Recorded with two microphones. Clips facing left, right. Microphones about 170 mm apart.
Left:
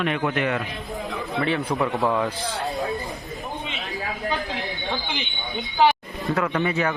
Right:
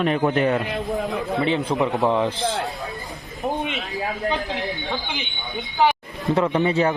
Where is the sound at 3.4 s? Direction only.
65° right (ahead or behind).